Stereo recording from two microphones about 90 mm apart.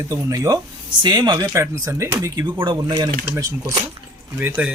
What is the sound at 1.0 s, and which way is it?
Speech, 55° right (ahead or behind).